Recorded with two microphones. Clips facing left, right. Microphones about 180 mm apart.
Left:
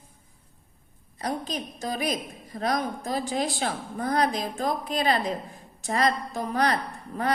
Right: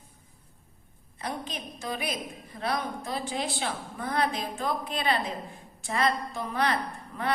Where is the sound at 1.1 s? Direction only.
40° left (ahead or behind).